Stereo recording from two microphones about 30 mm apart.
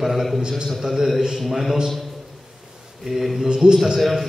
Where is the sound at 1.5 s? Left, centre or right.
Centre.